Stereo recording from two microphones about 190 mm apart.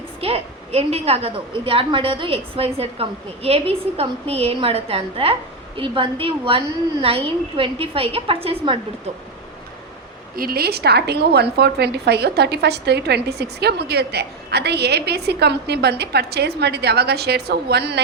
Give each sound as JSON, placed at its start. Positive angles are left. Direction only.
{"t": 0.2, "sound": "a woman's voice", "side_deg": -30}
{"t": 10.3, "sound": "a woman's voice", "side_deg": -50}